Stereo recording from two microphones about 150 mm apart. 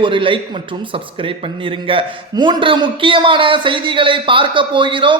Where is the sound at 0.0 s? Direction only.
35° right (ahead or behind).